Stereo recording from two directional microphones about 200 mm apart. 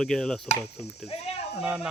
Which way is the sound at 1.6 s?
5° right (ahead or behind).